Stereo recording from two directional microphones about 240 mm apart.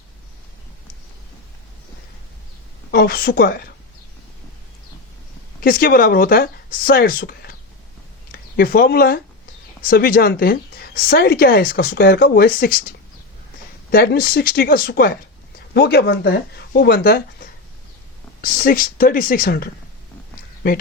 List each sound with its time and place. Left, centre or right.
2.9 s speech: left
5.5 s speech: left
13.9 s speech: left